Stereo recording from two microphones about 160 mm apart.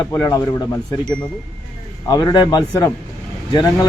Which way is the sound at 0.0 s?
20° left (ahead or behind).